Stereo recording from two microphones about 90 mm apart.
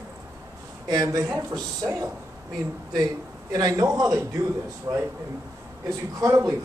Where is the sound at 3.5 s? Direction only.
40° right (ahead or behind).